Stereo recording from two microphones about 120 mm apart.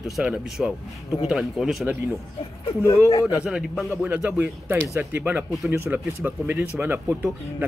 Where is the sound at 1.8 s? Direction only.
15° right (ahead or behind).